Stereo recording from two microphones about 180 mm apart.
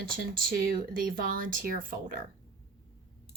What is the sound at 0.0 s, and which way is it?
Speech, 50° right (ahead or behind).